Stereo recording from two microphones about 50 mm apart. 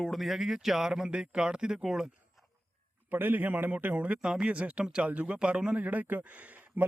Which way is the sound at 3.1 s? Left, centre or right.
Right.